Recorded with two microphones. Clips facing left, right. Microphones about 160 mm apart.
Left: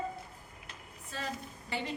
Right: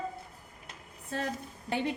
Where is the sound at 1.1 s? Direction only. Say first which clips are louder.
Right 5 dB; 60° right (ahead or behind).